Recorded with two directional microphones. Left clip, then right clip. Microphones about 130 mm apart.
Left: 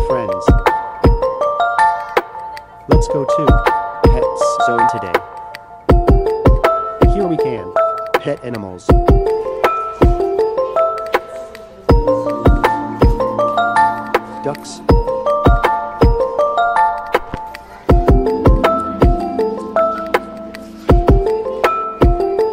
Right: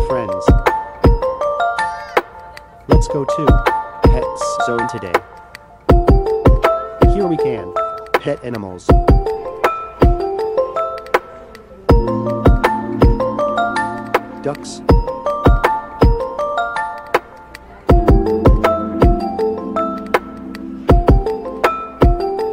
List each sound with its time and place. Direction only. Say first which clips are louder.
0.0 s music: left 1 dB; centre (ahead or behind)
2.9 s speech: left 2 dB; centre (ahead or behind)
4.0 s music: left 4 dB; centre (ahead or behind)